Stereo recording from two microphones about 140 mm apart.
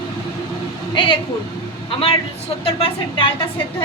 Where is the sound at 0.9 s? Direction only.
35° left (ahead or behind).